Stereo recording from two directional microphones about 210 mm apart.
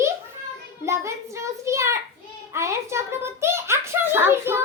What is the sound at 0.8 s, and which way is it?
A child's voice, 15° right (ahead or behind).